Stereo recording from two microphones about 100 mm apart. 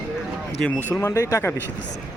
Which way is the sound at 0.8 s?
25° left (ahead or behind).